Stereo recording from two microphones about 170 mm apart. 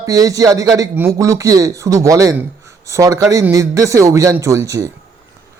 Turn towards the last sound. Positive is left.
turn(degrees=-20)  # may be behind; listen again after turning